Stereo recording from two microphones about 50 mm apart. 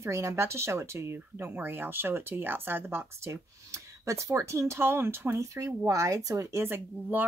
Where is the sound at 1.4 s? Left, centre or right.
Right.